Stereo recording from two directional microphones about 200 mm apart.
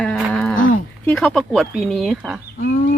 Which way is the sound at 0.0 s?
Centre (ahead or behind).